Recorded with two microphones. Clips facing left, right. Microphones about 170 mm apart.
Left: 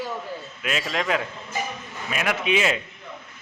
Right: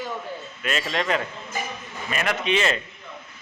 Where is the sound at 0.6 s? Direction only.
5° left (ahead or behind).